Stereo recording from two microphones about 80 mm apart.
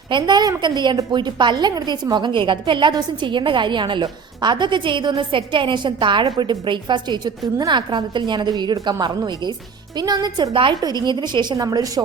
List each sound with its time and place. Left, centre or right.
0.1 s a woman's voice: right
4.0 s a woman's voice: right
6.4 s a woman's voice: right
10.8 s a woman's voice: right